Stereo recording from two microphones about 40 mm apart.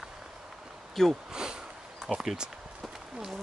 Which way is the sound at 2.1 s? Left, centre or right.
Centre.